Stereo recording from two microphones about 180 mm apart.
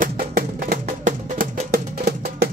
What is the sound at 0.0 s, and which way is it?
Music, 55° right (ahead or behind).